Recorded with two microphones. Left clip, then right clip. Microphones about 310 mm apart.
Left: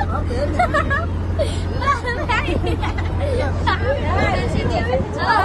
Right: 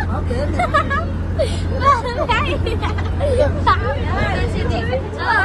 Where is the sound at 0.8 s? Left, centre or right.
Centre.